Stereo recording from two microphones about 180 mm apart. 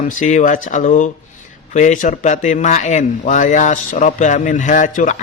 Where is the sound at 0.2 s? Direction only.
45° left (ahead or behind).